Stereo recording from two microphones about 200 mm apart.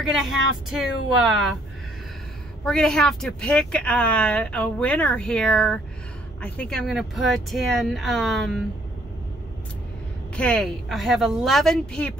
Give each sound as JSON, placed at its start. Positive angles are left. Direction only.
{"t": 0.1, "sound": "speech", "side_deg": 0}
{"t": 2.6, "sound": "speech", "side_deg": 5}
{"t": 10.3, "sound": "speech", "side_deg": 5}